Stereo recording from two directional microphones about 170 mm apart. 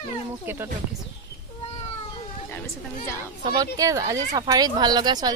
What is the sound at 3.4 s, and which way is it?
Speech, 20° right (ahead or behind).